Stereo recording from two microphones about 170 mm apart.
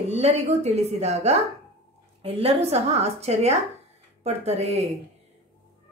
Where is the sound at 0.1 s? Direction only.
40° right (ahead or behind).